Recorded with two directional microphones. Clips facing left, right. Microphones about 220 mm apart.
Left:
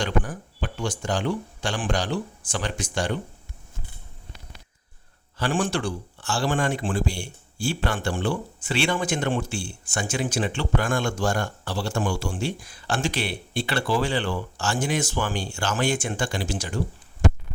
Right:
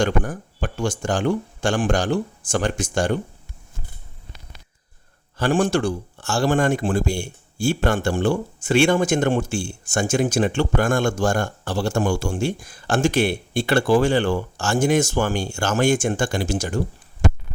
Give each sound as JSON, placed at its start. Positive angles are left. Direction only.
{"t": 0.0, "sound": "speech", "side_deg": -45}
{"t": 5.4, "sound": "speech", "side_deg": -40}